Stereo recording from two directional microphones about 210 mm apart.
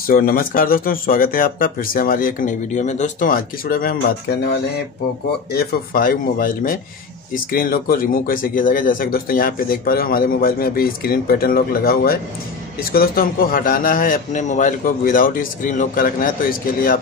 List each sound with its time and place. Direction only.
0.0 s speech: 45° left (ahead or behind)
5.5 s speech: 50° left (ahead or behind)